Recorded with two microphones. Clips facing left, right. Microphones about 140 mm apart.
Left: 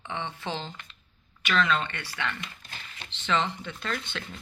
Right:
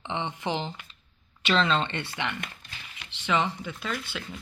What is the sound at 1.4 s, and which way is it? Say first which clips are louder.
Speech: right 2 dB; 30° right (ahead or behind).